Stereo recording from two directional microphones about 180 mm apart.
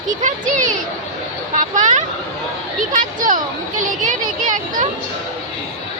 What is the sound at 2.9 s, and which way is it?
Speech, 45° right (ahead or behind).